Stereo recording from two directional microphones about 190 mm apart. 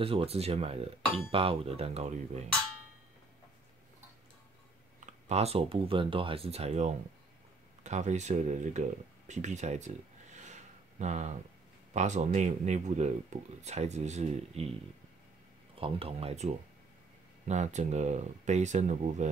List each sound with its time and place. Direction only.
0.0 s speech: 30° right (ahead or behind)
5.0 s speech: 35° right (ahead or behind)
9.3 s a sound: 40° right (ahead or behind)
11.9 s speech: 40° right (ahead or behind)
15.7 s speech: 30° right (ahead or behind)